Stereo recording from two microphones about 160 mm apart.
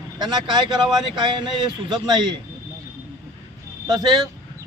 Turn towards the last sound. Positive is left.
turn(degrees=-25)  # may be behind; listen again after turning